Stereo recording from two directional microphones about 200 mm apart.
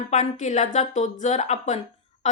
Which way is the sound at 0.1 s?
35° left (ahead or behind).